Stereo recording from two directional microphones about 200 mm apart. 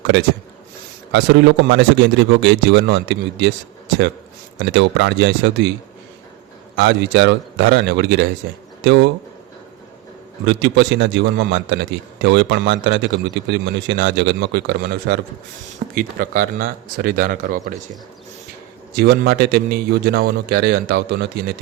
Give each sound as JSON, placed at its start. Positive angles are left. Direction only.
{"t": 1.1, "sound": "a man's voice", "side_deg": -60}
{"t": 4.6, "sound": "a man's voice", "side_deg": -60}
{"t": 6.7, "sound": "a man's voice", "side_deg": -60}
{"t": 10.4, "sound": "a man's voice", "side_deg": -60}
{"t": 16.0, "sound": "a man's voice", "side_deg": -45}
{"t": 18.9, "sound": "a man's voice", "side_deg": -55}